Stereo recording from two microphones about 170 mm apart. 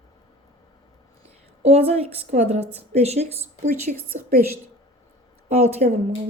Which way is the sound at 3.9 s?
55° right (ahead or behind).